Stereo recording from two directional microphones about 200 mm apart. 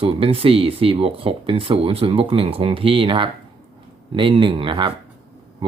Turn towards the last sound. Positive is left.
turn(degrees=-25)  # may be behind; listen again after turning